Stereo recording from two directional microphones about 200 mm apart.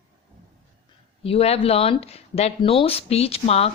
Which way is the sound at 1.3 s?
30° left (ahead or behind).